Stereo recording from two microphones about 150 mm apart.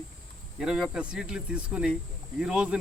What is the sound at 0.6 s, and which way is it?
Speech, 5° right (ahead or behind).